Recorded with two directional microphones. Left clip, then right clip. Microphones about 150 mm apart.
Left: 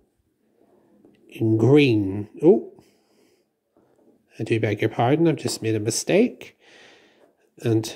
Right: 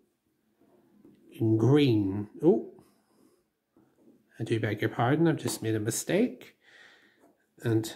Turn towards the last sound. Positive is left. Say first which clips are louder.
# left 6 dB
turn(degrees=30)  # may be behind; listen again after turning